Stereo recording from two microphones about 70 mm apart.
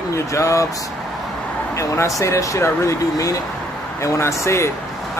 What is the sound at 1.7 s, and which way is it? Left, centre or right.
Speech, left.